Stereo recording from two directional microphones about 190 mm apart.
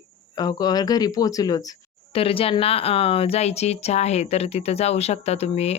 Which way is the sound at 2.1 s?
30° left (ahead or behind).